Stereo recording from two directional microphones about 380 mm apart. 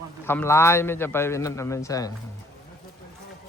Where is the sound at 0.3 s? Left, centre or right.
Centre.